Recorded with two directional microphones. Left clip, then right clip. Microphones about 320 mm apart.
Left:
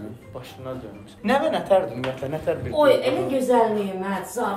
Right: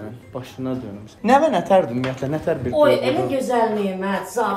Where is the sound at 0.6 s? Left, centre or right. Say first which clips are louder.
Right 6 dB; right.